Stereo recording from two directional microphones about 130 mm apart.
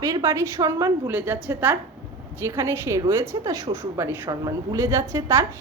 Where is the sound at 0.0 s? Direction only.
25° right (ahead or behind).